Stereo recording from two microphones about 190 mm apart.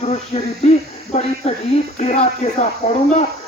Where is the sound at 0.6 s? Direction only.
35° left (ahead or behind).